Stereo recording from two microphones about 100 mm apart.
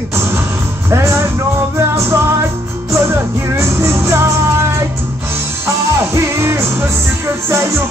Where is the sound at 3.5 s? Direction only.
25° right (ahead or behind).